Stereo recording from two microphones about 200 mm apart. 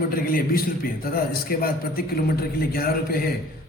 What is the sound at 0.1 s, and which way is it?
A man's voice, 45° left (ahead or behind).